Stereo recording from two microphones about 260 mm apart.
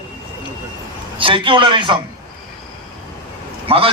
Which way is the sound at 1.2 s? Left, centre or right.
Centre.